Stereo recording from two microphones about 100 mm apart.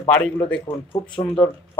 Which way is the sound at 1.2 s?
50° left (ahead or behind).